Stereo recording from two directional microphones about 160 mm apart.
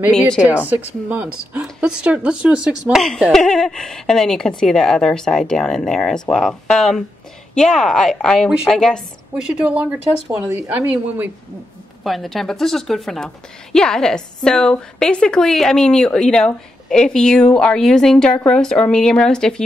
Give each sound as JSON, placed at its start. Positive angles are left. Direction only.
{"t": 0.7, "sound": "a woman's voice", "side_deg": -10}
{"t": 9.5, "sound": "speech", "side_deg": -10}
{"t": 12.0, "sound": "a woman's voice", "side_deg": 0}